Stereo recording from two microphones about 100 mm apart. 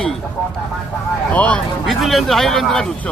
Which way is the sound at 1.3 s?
15° left (ahead or behind).